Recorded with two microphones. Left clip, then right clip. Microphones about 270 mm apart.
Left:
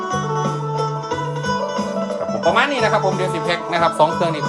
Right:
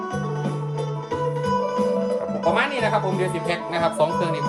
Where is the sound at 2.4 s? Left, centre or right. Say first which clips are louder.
Left 6 dB; left.